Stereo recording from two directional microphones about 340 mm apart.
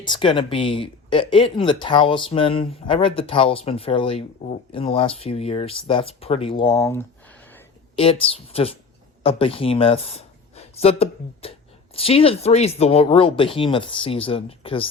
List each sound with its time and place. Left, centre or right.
0.0 s speech: centre